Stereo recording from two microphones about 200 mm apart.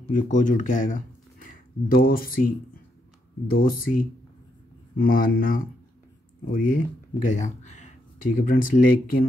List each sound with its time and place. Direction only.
0.1 s speech: 40° left (ahead or behind)